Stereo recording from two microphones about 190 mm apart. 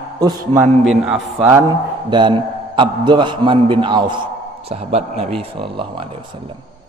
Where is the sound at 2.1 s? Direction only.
25° right (ahead or behind).